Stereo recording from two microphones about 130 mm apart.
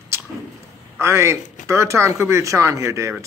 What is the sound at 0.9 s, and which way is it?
A man's voice, 20° right (ahead or behind).